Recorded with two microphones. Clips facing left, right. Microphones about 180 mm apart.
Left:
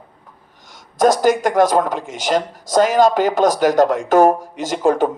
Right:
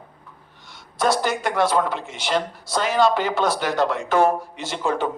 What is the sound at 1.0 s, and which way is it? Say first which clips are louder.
A man's voice: left 8 dB; 45° left (ahead or behind).